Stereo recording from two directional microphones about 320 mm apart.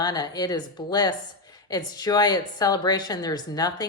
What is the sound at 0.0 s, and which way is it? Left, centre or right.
A woman's voice, centre.